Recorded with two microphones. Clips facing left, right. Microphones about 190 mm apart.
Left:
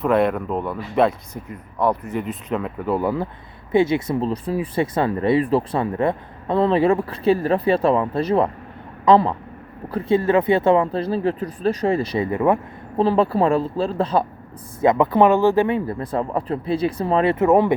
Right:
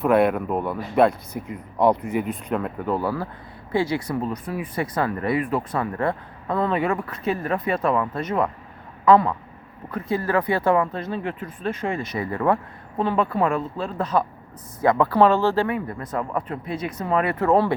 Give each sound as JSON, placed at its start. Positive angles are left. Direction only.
{"t": 0.0, "sound": "speech", "side_deg": 0}
{"t": 1.5, "sound": "speech", "side_deg": -15}
{"t": 2.2, "sound": "speech", "side_deg": 0}
{"t": 3.0, "sound": "speech", "side_deg": 20}
{"t": 12.3, "sound": "speech", "side_deg": 15}
{"t": 13.0, "sound": "speech", "side_deg": 35}
{"t": 14.8, "sound": "speech", "side_deg": 20}